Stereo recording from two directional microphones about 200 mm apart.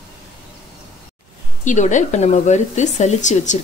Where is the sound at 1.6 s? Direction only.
40° left (ahead or behind).